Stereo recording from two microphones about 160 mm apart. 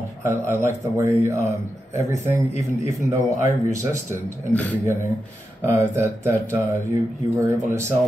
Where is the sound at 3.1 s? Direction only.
20° right (ahead or behind).